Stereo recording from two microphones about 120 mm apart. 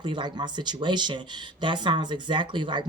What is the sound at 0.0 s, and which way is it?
Speech, 40° right (ahead or behind).